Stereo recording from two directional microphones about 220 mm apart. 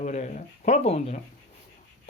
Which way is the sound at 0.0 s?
35° left (ahead or behind).